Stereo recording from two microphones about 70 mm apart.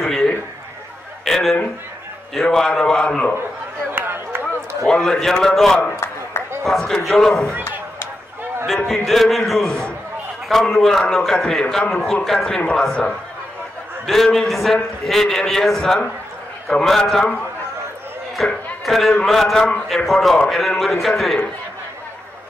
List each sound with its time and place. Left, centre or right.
0.0 s a sound: centre
2.3 s a man's voice: centre
3.9 s a sound: right
4.8 s a man's voice: centre
8.6 s a man's voice: centre
14.0 s a man's voice: centre
18.3 s a man's voice: centre